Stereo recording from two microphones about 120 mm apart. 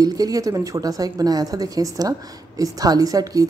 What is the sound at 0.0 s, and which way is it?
A woman's voice, 30° right (ahead or behind).